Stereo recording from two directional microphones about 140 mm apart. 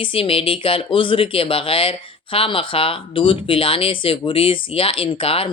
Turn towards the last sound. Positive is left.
turn(degrees=40)  # may be behind; listen again after turning